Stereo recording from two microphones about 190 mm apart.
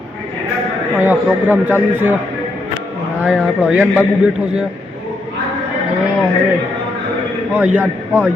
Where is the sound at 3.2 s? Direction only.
Centre (ahead or behind).